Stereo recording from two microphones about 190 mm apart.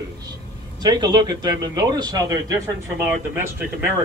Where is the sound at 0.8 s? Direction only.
20° right (ahead or behind).